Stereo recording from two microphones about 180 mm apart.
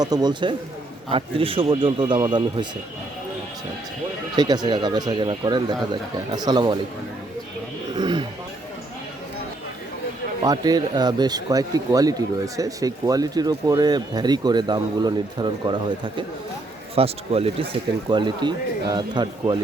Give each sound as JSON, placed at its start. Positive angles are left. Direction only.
{"t": 0.0, "sound": "speech", "side_deg": -20}
{"t": 4.4, "sound": "speech", "side_deg": -20}
{"t": 7.9, "sound": "speech", "side_deg": -25}
{"t": 10.4, "sound": "speech", "side_deg": -20}